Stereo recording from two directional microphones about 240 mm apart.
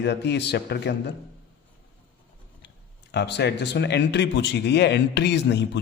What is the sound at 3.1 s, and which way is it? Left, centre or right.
A man's voice, left.